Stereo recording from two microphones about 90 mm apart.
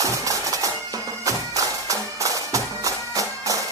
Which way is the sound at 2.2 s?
40° right (ahead or behind).